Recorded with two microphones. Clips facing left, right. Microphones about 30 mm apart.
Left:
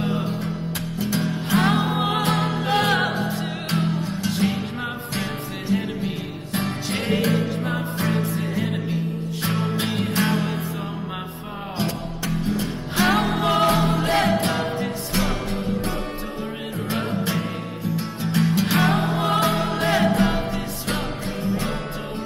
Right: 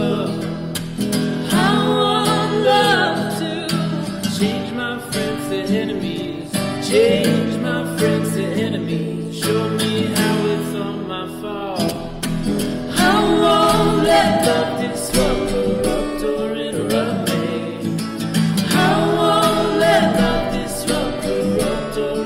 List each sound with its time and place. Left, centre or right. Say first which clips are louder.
0.0 s music: right 5 dB; right
1.1 s music: right 3 dB; right
1.9 s music: right 6 dB; right
2.2 s music: right 7 dB; right
6.5 s music: right 8 dB; right
9.5 s music: right 7 dB; right
11.8 s music: right 4 dB; right